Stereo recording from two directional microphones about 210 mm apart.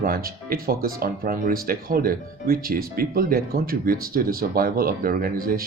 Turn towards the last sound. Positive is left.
turn(degrees=-45)  # may be behind; listen again after turning